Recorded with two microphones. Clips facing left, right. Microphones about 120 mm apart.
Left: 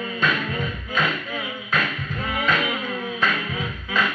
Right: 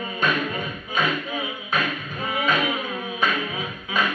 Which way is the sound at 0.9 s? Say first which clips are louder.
Right 1 dB; 15° right (ahead or behind).